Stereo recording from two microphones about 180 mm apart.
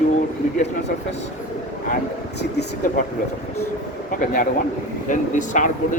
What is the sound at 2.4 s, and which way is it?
Speech, 65° left (ahead or behind).